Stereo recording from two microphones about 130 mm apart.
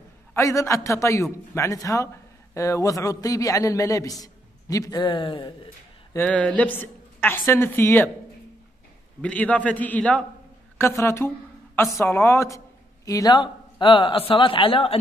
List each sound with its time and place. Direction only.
0.3 s a man's voice: 25° left (ahead or behind); by 5.5 s 40° left (ahead or behind)
6.1 s a woman's voice: 10° left (ahead or behind)
9.2 s a woman's voice: 10° left (ahead or behind)
10.8 s a woman's voice: 20° left (ahead or behind); by 15.0 s 45° left (ahead or behind)